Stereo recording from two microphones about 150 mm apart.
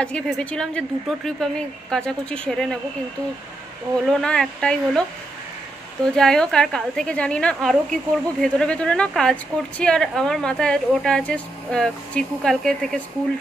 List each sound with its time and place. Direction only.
0.0 s a woman's voice: 5° left (ahead or behind)
4.0 s a woman's voice: 5° left (ahead or behind)
6.1 s a woman's voice: 5° left (ahead or behind)